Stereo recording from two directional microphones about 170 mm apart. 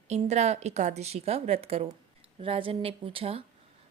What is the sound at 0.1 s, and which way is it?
A woman's voice, 40° right (ahead or behind).